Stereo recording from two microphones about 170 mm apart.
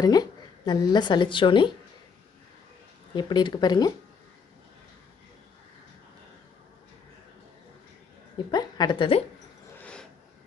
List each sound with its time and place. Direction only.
0.0 s a woman's voice: 25° left (ahead or behind)
3.2 s speech: 25° left (ahead or behind)
8.5 s speech: 25° left (ahead or behind)